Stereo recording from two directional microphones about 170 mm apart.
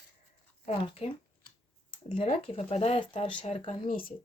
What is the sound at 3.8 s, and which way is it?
Speech, 55° left (ahead or behind).